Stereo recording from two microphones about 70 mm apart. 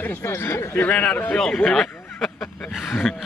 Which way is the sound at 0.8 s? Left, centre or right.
Left.